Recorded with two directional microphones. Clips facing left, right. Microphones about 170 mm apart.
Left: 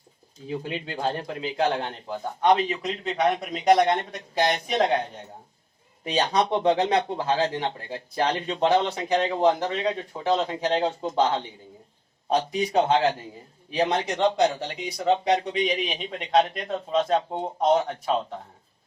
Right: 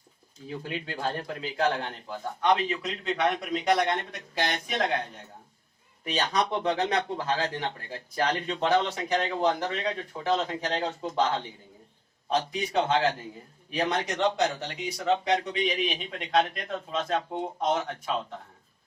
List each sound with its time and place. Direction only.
0.4 s speech: 25° left (ahead or behind)